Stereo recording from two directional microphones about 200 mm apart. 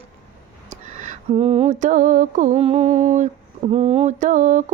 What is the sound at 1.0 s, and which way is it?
Mantra, 35° right (ahead or behind).